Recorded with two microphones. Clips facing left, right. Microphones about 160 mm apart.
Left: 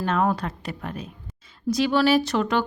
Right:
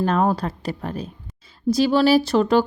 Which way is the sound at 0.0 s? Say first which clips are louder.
Right 3 dB; 35° right (ahead or behind).